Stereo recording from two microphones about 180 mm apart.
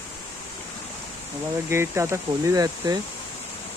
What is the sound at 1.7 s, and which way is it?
Speech, 15° right (ahead or behind).